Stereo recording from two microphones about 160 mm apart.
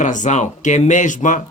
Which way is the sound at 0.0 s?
50° left (ahead or behind).